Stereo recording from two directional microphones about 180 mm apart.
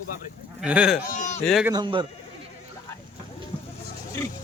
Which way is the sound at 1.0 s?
40° left (ahead or behind).